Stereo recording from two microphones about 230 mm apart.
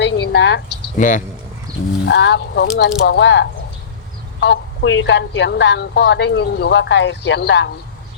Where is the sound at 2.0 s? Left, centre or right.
Left.